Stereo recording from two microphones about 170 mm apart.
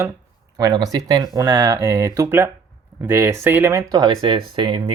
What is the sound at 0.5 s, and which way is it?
Speech, 20° right (ahead or behind).